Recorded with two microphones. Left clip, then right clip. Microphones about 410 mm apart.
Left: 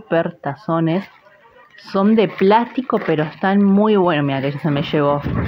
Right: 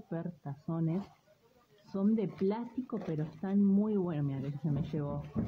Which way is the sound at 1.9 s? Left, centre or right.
Right.